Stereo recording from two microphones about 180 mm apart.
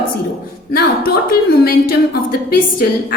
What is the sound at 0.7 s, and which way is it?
A woman's voice, 55° left (ahead or behind).